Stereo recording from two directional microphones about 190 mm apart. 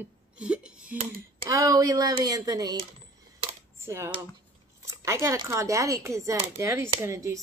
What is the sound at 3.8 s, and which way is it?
Speech, 15° right (ahead or behind).